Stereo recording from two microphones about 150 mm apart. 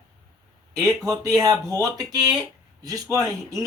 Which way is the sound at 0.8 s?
20° right (ahead or behind).